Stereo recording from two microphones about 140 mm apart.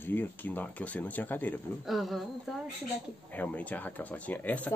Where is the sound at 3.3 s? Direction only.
10° left (ahead or behind).